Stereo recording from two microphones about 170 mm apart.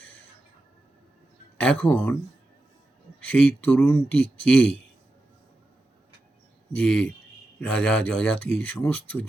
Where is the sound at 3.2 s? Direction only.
10° left (ahead or behind).